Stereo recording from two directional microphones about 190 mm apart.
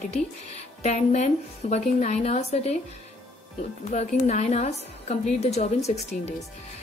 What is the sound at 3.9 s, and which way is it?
Speech, 35° left (ahead or behind).